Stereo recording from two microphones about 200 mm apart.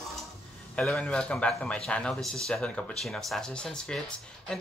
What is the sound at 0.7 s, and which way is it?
Speech, 5° left (ahead or behind).